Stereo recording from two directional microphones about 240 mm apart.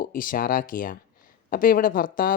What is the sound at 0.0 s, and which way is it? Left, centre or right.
Speech, left.